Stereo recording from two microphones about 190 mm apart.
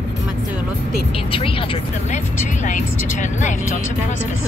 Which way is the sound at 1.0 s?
30° left (ahead or behind).